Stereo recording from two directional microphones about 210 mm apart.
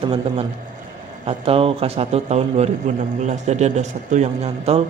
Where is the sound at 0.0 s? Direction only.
25° right (ahead or behind).